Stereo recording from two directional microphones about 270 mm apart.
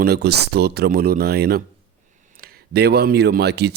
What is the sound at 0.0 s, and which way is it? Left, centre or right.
Speech, right.